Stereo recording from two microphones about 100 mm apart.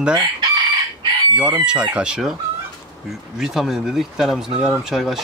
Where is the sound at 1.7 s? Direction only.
10° right (ahead or behind).